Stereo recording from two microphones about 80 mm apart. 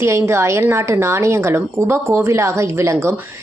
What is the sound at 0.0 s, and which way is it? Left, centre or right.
Speech, right.